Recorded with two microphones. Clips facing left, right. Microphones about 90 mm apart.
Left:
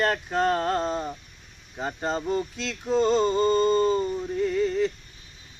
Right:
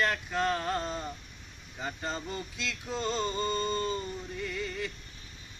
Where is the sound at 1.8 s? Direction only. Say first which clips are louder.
Left 7 dB; 35° left (ahead or behind).